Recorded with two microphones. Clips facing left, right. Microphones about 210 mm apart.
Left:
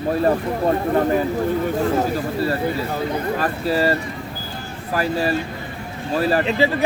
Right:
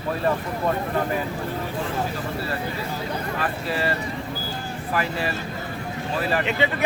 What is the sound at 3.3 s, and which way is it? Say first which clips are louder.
Speech: left 5 dB; 40° left (ahead or behind).